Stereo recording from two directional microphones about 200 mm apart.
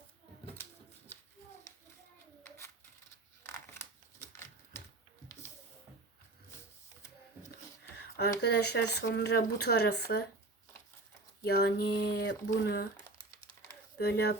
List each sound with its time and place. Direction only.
0.5 s pigeon: 10° left (ahead or behind)
3.4 s crushing: 15° left (ahead or behind)
7.9 s a sound: 55° left (ahead or behind)
8.4 s speech: 55° left (ahead or behind)
11.4 s speech: 55° left (ahead or behind)
13.1 s crumpling: 15° left (ahead or behind)
14.0 s speech: 55° left (ahead or behind)